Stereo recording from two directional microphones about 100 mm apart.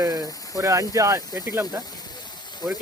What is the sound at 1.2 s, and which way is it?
Speech, 40° left (ahead or behind).